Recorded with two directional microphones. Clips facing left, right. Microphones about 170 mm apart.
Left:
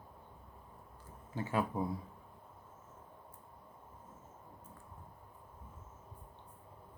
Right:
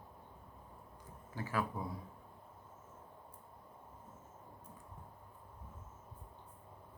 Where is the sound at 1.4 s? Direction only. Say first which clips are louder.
Left 3 dB; 25° left (ahead or behind).